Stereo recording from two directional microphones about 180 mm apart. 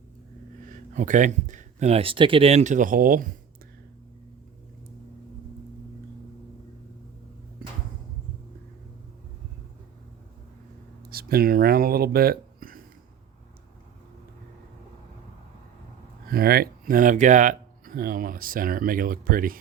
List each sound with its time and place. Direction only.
0.7 s speech: 45° right (ahead or behind)
11.1 s speech: 55° right (ahead or behind)
16.3 s speech: 55° right (ahead or behind)